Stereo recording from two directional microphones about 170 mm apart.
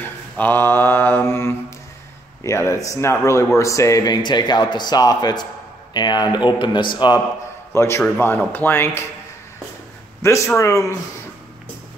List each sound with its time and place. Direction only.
0.0 s a sound: 10° left (ahead or behind)
2.4 s speech: 20° left (ahead or behind)
7.7 s speech: 15° left (ahead or behind)
10.2 s speech: 15° left (ahead or behind)